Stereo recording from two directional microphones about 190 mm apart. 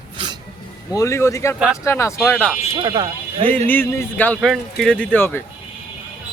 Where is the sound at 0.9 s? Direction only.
15° left (ahead or behind).